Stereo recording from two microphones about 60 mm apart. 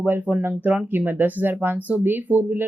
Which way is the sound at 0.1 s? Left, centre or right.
Right.